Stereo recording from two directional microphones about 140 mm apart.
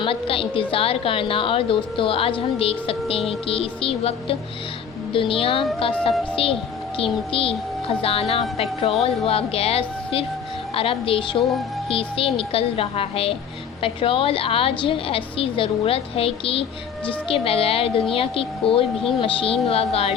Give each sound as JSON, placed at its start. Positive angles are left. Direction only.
{"t": 0.0, "sound": "a woman's voice", "side_deg": 40}